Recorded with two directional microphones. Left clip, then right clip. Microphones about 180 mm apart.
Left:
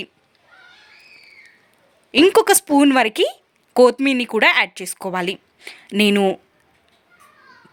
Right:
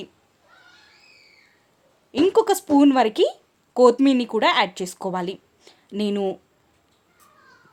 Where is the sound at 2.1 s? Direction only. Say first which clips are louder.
Left 5 dB; 15° left (ahead or behind).